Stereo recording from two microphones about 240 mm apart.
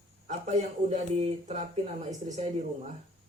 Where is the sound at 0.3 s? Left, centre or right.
Right.